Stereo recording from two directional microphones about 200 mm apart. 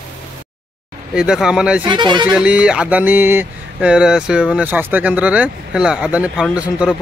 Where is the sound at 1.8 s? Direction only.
25° right (ahead or behind).